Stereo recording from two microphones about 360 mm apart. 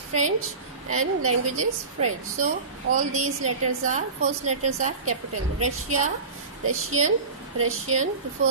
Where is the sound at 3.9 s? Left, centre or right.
Centre.